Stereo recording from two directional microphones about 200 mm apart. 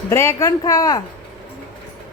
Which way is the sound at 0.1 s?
15° left (ahead or behind).